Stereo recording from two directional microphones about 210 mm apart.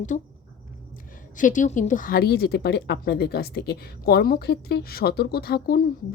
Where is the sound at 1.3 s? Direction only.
40° left (ahead or behind).